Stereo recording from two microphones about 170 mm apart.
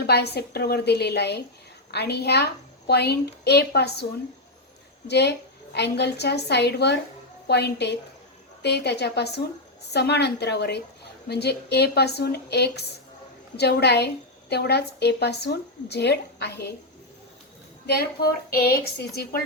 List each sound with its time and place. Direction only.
0.0 s speech: 70° left (ahead or behind)
5.0 s a woman's voice: 80° left
17.8 s speech: 70° left (ahead or behind)